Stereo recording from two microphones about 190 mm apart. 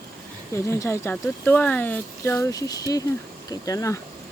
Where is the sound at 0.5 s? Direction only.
15° left (ahead or behind).